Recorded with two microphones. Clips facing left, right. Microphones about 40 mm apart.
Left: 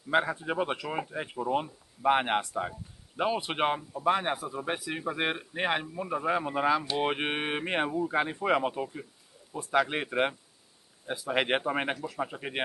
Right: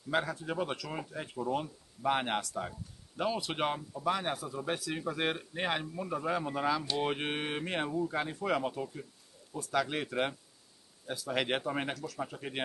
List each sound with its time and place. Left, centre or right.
0.1 s speech: left